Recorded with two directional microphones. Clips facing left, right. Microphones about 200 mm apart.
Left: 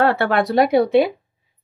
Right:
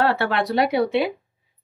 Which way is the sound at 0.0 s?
50° left (ahead or behind).